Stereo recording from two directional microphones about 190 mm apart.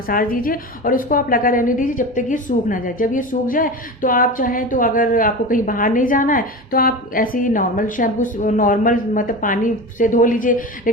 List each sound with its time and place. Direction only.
0.1 s a woman's voice: 50° left (ahead or behind)